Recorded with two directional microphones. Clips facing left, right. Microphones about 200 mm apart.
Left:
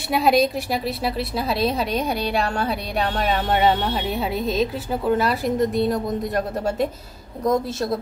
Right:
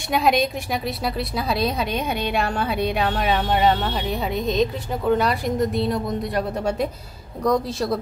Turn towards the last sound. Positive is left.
turn(degrees=20)  # may be behind; listen again after turning